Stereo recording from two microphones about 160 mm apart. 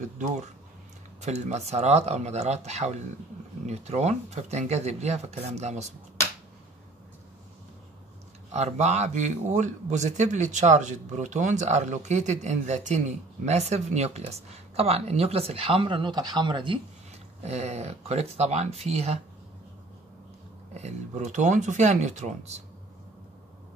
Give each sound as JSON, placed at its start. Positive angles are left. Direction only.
{"t": 0.0, "sound": "speech", "side_deg": -45}
{"t": 8.5, "sound": "speech", "side_deg": -45}
{"t": 17.4, "sound": "speech", "side_deg": -45}
{"t": 20.7, "sound": "speech", "side_deg": -45}